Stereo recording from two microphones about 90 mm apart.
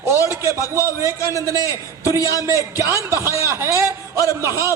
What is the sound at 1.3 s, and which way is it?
Speech, 35° left (ahead or behind).